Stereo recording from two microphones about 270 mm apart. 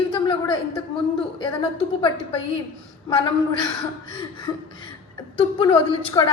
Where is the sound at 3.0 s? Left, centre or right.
Centre.